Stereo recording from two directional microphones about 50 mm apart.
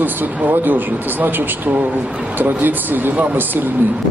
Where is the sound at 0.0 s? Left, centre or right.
Right.